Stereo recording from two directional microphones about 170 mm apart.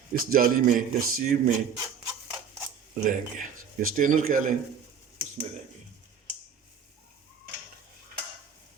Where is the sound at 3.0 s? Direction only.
50° right (ahead or behind).